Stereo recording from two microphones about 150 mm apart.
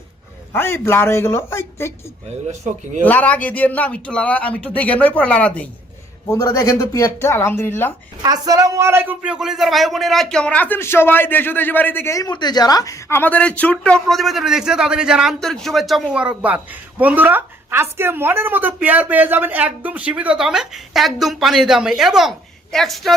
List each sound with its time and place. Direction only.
0.5 s a man's voice: 15° left (ahead or behind)
3.0 s a man's voice: 10° left (ahead or behind)
6.3 s a man's voice: 20° left (ahead or behind)
8.2 s a man's voice: 25° right (ahead or behind); by 23.1 s centre (ahead or behind)